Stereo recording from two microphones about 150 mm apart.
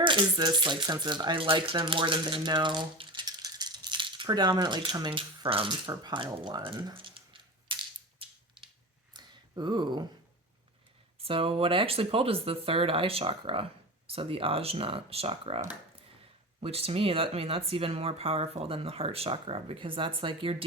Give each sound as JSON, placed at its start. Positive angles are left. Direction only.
{"t": 0.0, "sound": "speech", "side_deg": -30}
{"t": 8.2, "sound": "a sound", "side_deg": -35}
{"t": 11.2, "sound": "speech", "side_deg": -40}